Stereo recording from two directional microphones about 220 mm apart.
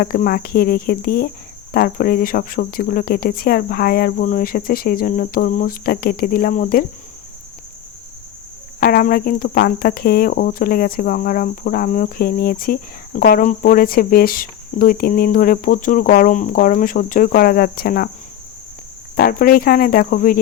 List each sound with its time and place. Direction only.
0.0 s speech: 40° left (ahead or behind)
8.8 s speech: 40° left (ahead or behind)
19.1 s speech: 40° left (ahead or behind)